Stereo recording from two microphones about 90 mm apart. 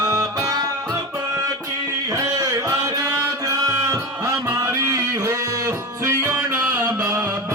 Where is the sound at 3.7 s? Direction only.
40° right (ahead or behind).